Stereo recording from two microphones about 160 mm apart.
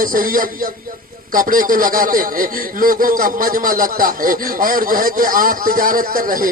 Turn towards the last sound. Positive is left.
turn(degrees=-60)  # may be behind; listen again after turning